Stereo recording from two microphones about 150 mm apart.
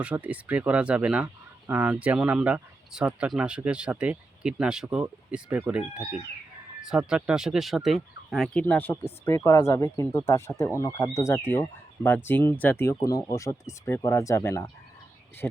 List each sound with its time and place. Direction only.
0.0 s speech: 10° right (ahead or behind)
8.6 s speech: 15° left (ahead or behind)